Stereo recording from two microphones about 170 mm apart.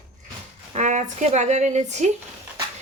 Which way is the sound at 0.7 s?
45° right (ahead or behind).